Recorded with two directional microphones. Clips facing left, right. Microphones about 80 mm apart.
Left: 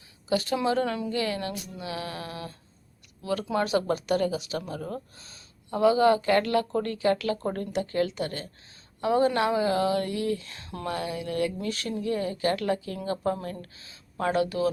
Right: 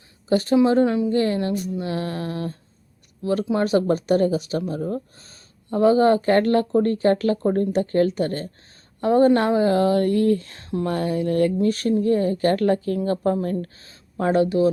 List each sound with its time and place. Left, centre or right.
0.3 s speech: right
1.1 s speech: right
3.6 s speech: right